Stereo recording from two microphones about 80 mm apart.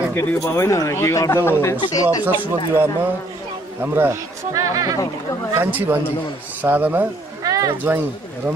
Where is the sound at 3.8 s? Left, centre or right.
Right.